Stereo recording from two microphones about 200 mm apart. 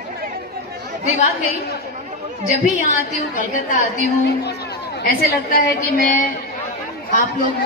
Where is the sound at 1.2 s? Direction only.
50° left (ahead or behind).